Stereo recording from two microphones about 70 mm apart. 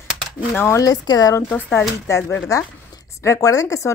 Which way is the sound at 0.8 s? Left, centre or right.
Left.